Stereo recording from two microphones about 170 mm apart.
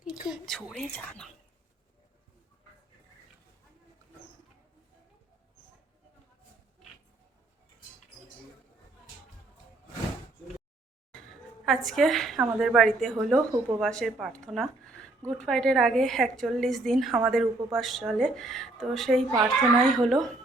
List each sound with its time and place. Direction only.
0.3 s a woman's voice: centre (ahead or behind)
11.1 s a sound: centre (ahead or behind)
11.9 s a woman's voice: centre (ahead or behind)